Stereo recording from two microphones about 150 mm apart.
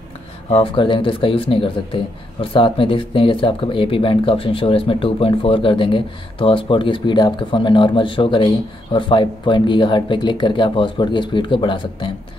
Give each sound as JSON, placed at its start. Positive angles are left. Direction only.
{"t": 0.5, "sound": "speech", "side_deg": 35}